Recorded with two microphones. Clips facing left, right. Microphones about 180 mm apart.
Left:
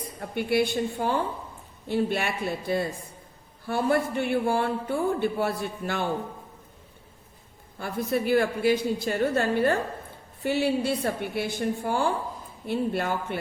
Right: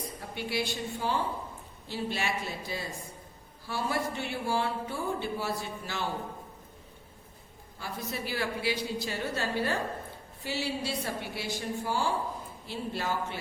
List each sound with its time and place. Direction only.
0.2 s a man's voice: 55° left (ahead or behind)
7.8 s a woman's voice: 55° left (ahead or behind)